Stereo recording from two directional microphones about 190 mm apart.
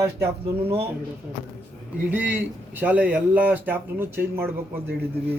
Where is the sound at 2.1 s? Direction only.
10° right (ahead or behind).